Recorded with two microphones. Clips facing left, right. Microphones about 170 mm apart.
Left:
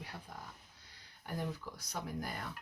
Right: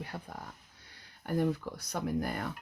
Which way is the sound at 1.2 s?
60° right (ahead or behind).